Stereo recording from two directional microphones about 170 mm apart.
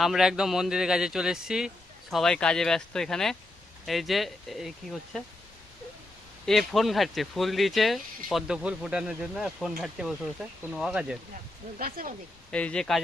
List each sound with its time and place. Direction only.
0.0 s speech: centre (ahead or behind)
6.4 s speech: centre (ahead or behind)
11.8 s speech: 55° right (ahead or behind)
12.5 s speech: 5° left (ahead or behind)